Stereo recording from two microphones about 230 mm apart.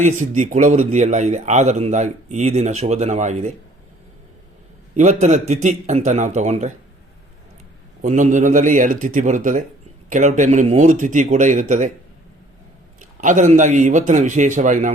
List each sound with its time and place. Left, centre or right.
0.0 s a man's voice: right
4.9 s a man's voice: right
8.0 s a man's voice: right
13.0 s a man's voice: right